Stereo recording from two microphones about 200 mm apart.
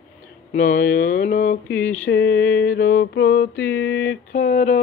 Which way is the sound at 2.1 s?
60° left (ahead or behind).